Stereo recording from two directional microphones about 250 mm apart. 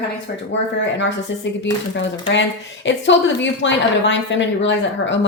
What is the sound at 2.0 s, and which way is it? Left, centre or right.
A woman's voice, left.